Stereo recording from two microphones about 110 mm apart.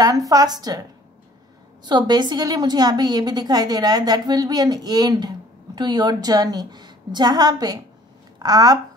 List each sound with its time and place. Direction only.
0.0 s a woman's voice: 35° right (ahead or behind)
1.9 s a woman's voice: 40° right (ahead or behind)